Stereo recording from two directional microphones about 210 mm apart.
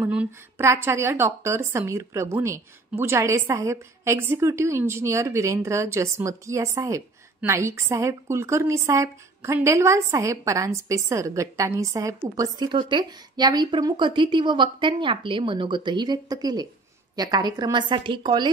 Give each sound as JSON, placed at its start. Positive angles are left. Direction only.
{"t": 0.0, "sound": "a woman's voice", "side_deg": -10}